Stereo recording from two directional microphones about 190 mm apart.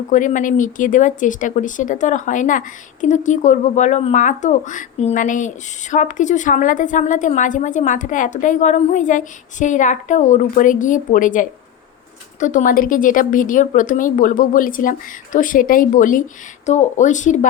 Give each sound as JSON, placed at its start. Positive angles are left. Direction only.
{"t": 0.1, "sound": "a woman's voice", "side_deg": 40}